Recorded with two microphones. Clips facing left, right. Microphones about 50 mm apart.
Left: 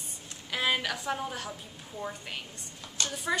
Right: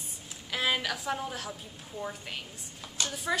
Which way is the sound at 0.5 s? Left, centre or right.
Centre.